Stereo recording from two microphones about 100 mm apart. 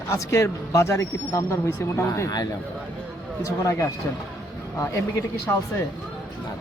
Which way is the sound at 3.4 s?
30° left (ahead or behind).